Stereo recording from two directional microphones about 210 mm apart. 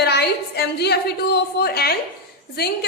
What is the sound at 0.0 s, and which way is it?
A woman's voice, 50° left (ahead or behind).